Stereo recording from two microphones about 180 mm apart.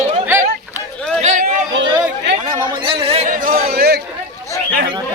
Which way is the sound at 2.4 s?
25° right (ahead or behind).